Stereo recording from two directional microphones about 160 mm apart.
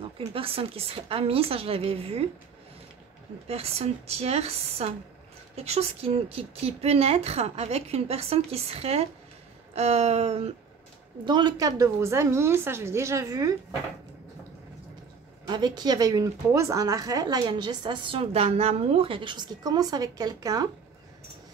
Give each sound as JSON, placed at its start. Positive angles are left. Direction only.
{"t": 0.3, "sound": "speech", "side_deg": -35}
{"t": 3.4, "sound": "speech", "side_deg": -40}
{"t": 11.2, "sound": "a woman's voice", "side_deg": -25}
{"t": 15.4, "sound": "a woman's voice", "side_deg": -25}